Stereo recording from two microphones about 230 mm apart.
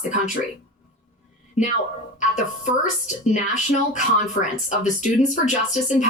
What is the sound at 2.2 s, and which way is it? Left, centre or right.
A woman's voice, left.